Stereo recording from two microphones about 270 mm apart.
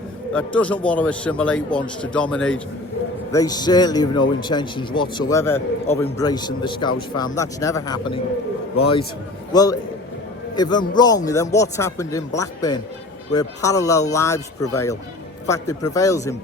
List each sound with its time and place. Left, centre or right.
0.3 s a man's voice: centre
3.3 s a man's voice: centre